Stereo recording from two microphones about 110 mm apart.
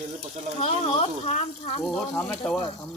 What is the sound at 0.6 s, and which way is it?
Speech, 70° left (ahead or behind).